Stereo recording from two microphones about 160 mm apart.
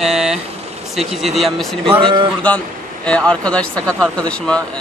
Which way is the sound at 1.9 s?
35° right (ahead or behind).